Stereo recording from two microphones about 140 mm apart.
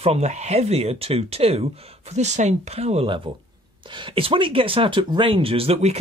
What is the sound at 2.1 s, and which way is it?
Speech, 55° right (ahead or behind).